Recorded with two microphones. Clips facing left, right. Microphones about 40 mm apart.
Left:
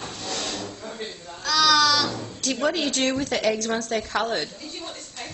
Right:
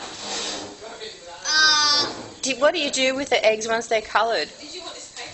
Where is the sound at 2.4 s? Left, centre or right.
Right.